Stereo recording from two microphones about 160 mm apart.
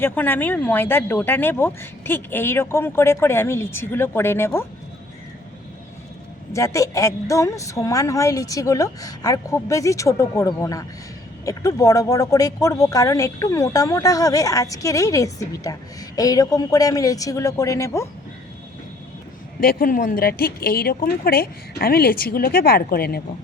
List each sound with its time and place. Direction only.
0.0 s speech: 10° left (ahead or behind)
6.5 s speech: 20° left (ahead or behind)
19.5 s speech: 60° left (ahead or behind)